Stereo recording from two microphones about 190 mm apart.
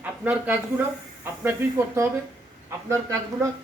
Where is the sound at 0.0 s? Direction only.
5° right (ahead or behind).